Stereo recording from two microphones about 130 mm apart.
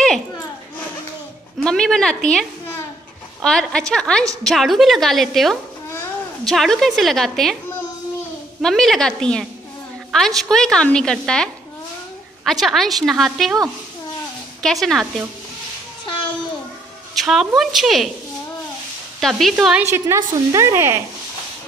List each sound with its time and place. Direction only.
1.6 s a woman's voice: 5° left (ahead or behind)
3.4 s a woman's voice: 5° left (ahead or behind)
8.6 s a woman's voice: 5° left (ahead or behind)
14.6 s a woman's voice: centre (ahead or behind)
17.1 s a woman's voice: centre (ahead or behind)
19.1 s a woman's voice: centre (ahead or behind)
19.9 s speech: 20° right (ahead or behind)